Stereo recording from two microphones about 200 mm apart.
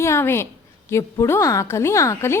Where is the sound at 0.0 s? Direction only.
10° left (ahead or behind).